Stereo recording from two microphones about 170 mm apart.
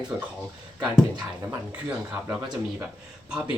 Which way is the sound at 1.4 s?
10° right (ahead or behind).